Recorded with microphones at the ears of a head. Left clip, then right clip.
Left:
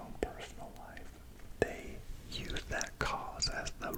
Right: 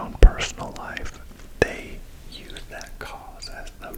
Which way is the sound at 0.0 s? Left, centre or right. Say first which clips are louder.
Right 16 dB; right.